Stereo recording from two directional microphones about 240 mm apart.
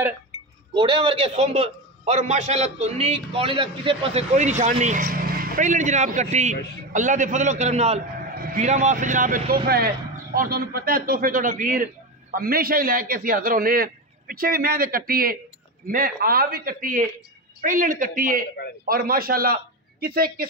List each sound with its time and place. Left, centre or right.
0.7 s a man's voice: right